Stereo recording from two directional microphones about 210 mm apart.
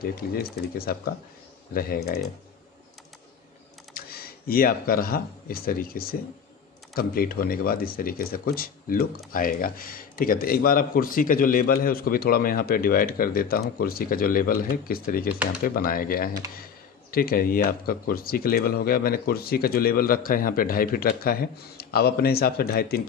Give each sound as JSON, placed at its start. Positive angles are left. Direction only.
{"t": 0.0, "sound": "speech", "side_deg": 45}
{"t": 3.9, "sound": "speech", "side_deg": 45}